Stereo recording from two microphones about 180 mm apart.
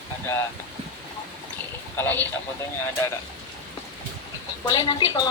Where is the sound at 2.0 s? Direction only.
10° left (ahead or behind).